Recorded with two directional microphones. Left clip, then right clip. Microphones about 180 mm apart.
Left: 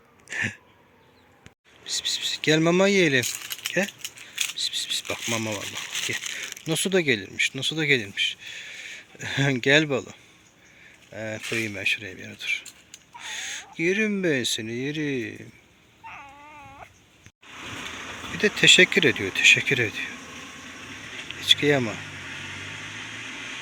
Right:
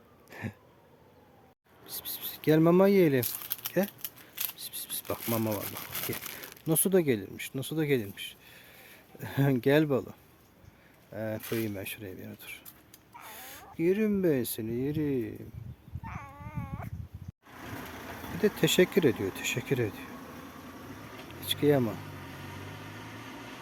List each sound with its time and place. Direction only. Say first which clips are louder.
0.3 s a sound: left 15 dB; 5° right (ahead or behind)
1.8 s keys jangling: left 16 dB; 15° right (ahead or behind)
4.5 s a sound: left 16 dB; 15° right (ahead or behind)
5.3 s speech: left 2 dB; 15° right (ahead or behind)
5.8 s a sound: left 9 dB; 70° right (ahead or behind)
6.4 s speech: left 4 dB; 15° right (ahead or behind)
11.2 s speech: left 3 dB; 15° right (ahead or behind)
11.4 s speech: left 6 dB; centre (ahead or behind)
11.8 s speech: left 14 dB; 15° right (ahead or behind)
16.0 s dog: left 3 dB; 5° right (ahead or behind)
18.3 s speech: left 9 dB; 10° right (ahead or behind)
21.4 s a sound: left 7 dB; 10° right (ahead or behind)